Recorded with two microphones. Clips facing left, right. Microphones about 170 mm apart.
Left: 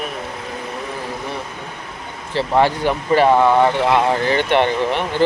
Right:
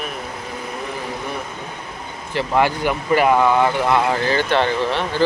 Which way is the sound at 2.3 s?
30° left (ahead or behind).